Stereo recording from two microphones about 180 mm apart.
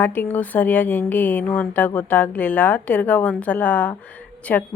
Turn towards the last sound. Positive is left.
turn(degrees=10)  # may be behind; listen again after turning